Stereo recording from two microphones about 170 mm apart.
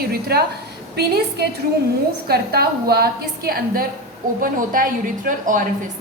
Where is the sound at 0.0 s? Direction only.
65° right (ahead or behind).